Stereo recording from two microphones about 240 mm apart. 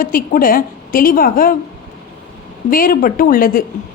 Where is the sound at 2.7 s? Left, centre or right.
Left.